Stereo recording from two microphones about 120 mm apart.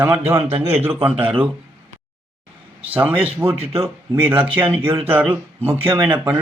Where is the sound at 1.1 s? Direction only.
50° right (ahead or behind).